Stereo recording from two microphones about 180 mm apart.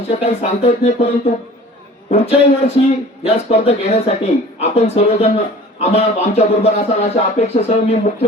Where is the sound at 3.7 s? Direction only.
35° left (ahead or behind).